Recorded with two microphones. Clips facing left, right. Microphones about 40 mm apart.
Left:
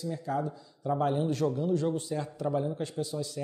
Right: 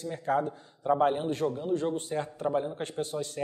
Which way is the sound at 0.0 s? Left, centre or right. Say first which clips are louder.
Right 3 dB; right.